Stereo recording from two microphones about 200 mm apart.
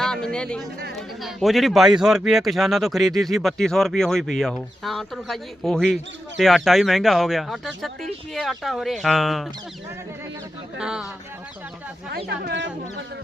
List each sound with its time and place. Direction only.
0.0 s speech: 5° left (ahead or behind)
10.8 s speech: 5° right (ahead or behind)
12.1 s speech: 60° right (ahead or behind)